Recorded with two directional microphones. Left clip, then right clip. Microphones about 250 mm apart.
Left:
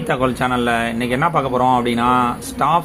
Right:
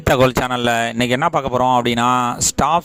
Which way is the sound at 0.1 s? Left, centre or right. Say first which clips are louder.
Right 3 dB; right.